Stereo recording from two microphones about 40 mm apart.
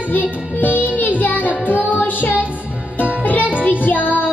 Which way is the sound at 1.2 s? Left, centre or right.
Left.